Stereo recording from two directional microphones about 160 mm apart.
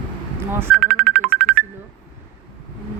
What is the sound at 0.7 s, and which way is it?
Music, centre (ahead or behind).